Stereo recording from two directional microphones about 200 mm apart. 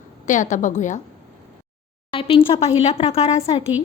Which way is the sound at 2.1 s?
25° left (ahead or behind).